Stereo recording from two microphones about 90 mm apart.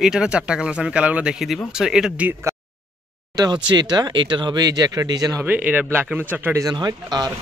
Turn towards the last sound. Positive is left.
turn(degrees=-45)  # may be behind; listen again after turning